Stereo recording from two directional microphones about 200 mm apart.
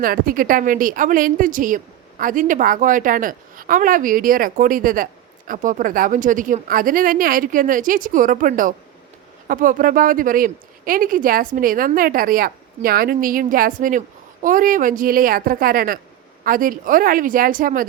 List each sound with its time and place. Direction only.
0.0 s a woman's voice: 45° right (ahead or behind)